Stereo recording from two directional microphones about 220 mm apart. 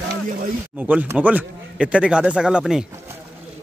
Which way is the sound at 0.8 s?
5° right (ahead or behind).